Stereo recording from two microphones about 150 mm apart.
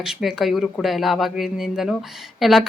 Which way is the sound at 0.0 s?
Centre (ahead or behind).